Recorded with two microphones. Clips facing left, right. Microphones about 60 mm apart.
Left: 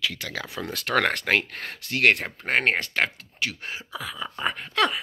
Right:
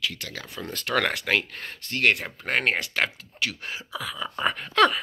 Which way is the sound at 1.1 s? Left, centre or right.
Left.